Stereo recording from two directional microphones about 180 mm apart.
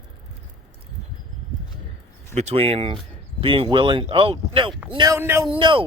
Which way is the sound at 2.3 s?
35° right (ahead or behind).